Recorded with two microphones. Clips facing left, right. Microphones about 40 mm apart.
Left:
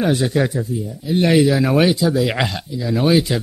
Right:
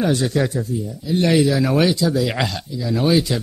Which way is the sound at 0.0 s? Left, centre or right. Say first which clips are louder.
Left 1 dB; centre.